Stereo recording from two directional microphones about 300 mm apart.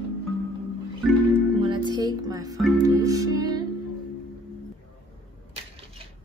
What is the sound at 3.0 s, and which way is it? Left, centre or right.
Speech, centre.